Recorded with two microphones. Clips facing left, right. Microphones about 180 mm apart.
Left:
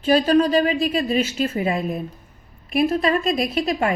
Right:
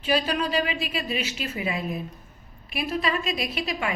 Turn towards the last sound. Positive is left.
turn(degrees=45)  # may be behind; listen again after turning